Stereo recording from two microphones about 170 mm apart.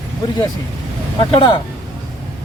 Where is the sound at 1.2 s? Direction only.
30° left (ahead or behind).